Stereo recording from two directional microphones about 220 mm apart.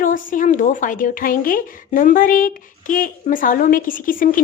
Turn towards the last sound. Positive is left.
turn(degrees=40)  # may be behind; listen again after turning